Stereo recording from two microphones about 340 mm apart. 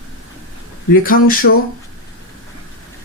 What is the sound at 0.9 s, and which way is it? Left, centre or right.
Speech, left.